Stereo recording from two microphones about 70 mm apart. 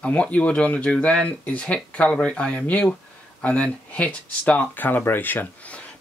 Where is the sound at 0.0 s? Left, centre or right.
Centre.